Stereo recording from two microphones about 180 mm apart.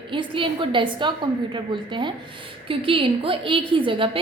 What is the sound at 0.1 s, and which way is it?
A woman's voice, 25° right (ahead or behind).